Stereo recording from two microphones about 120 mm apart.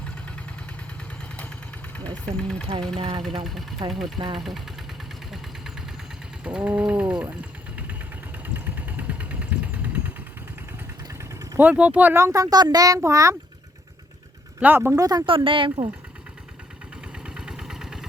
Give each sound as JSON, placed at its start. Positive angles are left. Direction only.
{"t": 2.0, "sound": "speech", "side_deg": 5}
{"t": 3.0, "sound": "speech", "side_deg": -45}
{"t": 3.4, "sound": "speech", "side_deg": 0}
{"t": 6.4, "sound": "ratchet", "side_deg": -10}
{"t": 8.5, "sound": "vehicle", "side_deg": -15}
{"t": 11.1, "sound": "a child's voice", "side_deg": -20}
{"t": 14.6, "sound": "ratchet", "side_deg": -15}
{"t": 14.9, "sound": "speech", "side_deg": -30}
{"t": 15.3, "sound": "speech", "side_deg": -45}
{"t": 17.2, "sound": "vehicle", "side_deg": -5}